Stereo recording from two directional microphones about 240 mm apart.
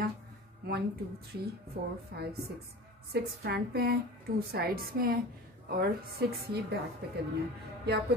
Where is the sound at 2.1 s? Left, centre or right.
Right.